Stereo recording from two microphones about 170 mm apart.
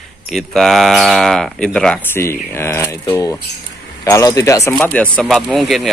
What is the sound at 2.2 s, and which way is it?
Speech, 15° left (ahead or behind).